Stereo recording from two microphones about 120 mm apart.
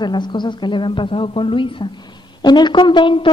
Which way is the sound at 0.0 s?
40° left (ahead or behind).